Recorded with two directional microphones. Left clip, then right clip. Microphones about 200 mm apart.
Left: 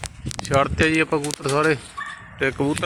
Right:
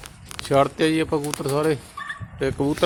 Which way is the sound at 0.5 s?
5° right (ahead or behind).